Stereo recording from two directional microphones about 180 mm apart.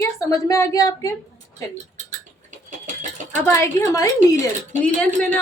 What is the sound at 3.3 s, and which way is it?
Speech, 15° left (ahead or behind).